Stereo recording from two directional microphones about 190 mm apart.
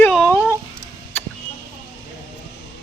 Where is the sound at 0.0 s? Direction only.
5° left (ahead or behind).